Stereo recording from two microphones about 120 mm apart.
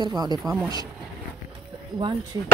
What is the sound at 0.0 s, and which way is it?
Speech, 35° right (ahead or behind).